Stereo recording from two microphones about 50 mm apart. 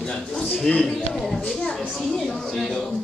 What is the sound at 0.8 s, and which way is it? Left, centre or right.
Speech, centre.